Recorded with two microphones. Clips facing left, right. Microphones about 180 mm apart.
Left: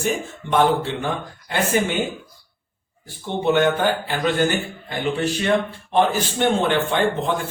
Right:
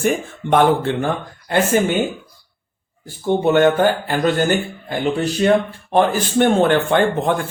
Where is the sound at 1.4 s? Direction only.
45° right (ahead or behind).